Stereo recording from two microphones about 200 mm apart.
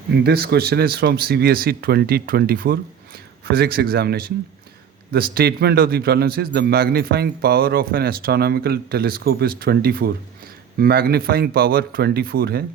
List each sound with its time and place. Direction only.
0.2 s a man's voice: 50° right (ahead or behind)